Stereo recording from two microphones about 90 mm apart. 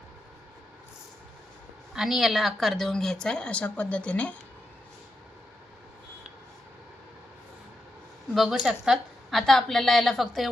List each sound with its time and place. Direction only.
1.9 s a woman's voice: 5° right (ahead or behind); by 4.4 s 15° left (ahead or behind)
8.3 s a woman's voice: centre (ahead or behind)